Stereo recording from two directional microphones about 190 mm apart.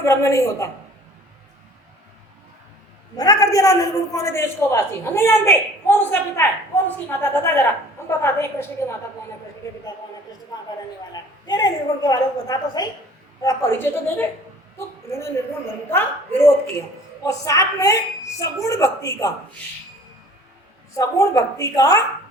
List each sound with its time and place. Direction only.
0.0 s a man's voice: 15° left (ahead or behind)
3.2 s a man's voice: 20° left (ahead or behind)
11.1 s a woman's voice: 20° left (ahead or behind)
17.2 s a man's voice: 15° left (ahead or behind)
20.9 s a man's voice: 15° left (ahead or behind)